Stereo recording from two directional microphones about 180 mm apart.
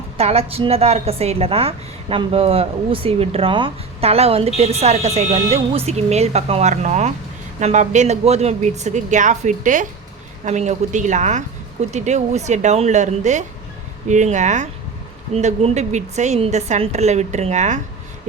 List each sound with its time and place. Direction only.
0.2 s a woman's voice: 35° right (ahead or behind)